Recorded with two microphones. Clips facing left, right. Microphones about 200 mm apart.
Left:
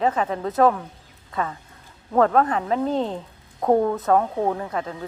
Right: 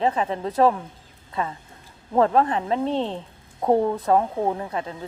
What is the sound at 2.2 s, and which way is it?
Speech, 25° right (ahead or behind).